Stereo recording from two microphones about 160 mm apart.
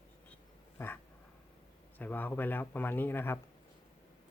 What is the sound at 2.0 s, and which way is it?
Speech, 10° left (ahead or behind).